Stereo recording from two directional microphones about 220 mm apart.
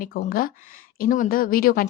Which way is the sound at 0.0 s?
40° left (ahead or behind).